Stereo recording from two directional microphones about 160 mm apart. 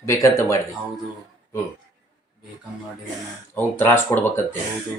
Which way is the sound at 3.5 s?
15° left (ahead or behind).